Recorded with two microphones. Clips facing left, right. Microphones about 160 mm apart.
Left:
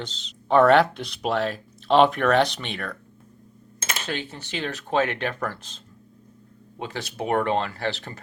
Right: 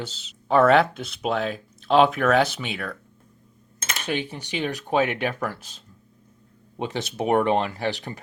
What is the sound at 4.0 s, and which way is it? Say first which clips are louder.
Speech: right 6 dB; 15° right (ahead or behind).